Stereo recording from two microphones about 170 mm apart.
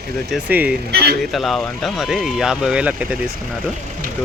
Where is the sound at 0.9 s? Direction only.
65° right (ahead or behind).